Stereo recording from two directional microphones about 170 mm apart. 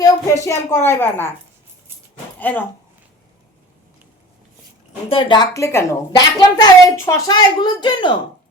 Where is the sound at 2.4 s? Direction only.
10° left (ahead or behind).